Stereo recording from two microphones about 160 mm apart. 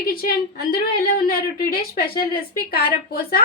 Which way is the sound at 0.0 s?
65° left (ahead or behind).